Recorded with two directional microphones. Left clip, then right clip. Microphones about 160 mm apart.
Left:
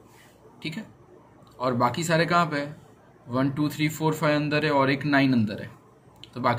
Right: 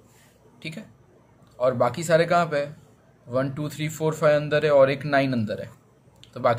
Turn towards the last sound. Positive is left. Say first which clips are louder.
# right 3 dB
turn(degrees=-35)  # may be behind; listen again after turning